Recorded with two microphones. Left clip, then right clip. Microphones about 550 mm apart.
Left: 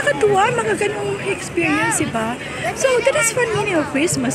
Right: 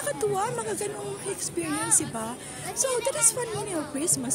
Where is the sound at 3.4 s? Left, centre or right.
Right.